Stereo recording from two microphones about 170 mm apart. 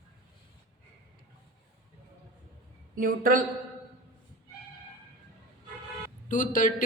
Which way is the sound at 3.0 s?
55° right (ahead or behind).